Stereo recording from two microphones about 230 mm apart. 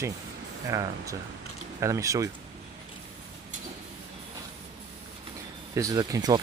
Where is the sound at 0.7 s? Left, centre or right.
Centre.